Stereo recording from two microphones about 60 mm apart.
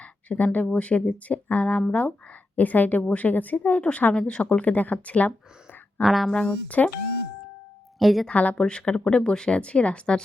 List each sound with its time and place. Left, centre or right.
0.0 s speech: left
6.0 s speech: centre
6.5 s speech: left
7.9 s speech: centre
8.3 s speech: left